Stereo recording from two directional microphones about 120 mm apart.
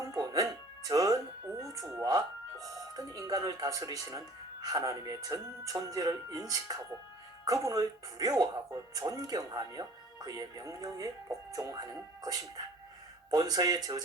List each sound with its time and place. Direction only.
0.1 s music: 25° right (ahead or behind)
1.6 s speech: 30° right (ahead or behind)